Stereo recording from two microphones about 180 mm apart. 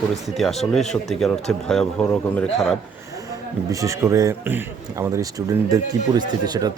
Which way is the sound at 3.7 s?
15° right (ahead or behind).